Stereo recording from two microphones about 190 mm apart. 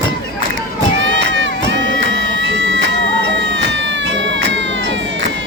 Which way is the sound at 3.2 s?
75° right (ahead or behind).